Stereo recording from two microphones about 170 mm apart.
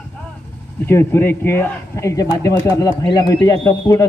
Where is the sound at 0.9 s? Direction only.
15° left (ahead or behind).